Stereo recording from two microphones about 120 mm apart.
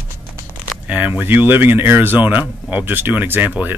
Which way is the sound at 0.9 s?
10° right (ahead or behind).